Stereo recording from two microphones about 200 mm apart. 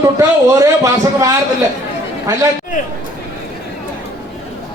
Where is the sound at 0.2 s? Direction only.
15° right (ahead or behind).